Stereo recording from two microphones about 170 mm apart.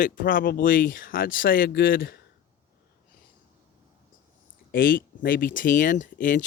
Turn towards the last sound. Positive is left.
turn(degrees=50)  # may be behind; listen again after turning